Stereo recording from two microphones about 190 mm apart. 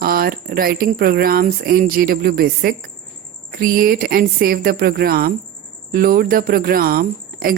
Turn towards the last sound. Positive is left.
turn(degrees=-50)  # may be behind; listen again after turning